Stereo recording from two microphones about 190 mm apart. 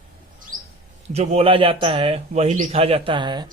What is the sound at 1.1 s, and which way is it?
Speech, 30° right (ahead or behind).